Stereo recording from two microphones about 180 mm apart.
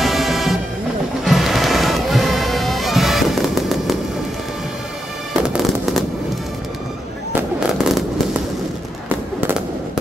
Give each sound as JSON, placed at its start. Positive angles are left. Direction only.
{"t": 0.0, "sound": "music", "side_deg": 0}
{"t": 5.3, "sound": "fireworks", "side_deg": -5}
{"t": 7.6, "sound": "fireworks", "side_deg": -5}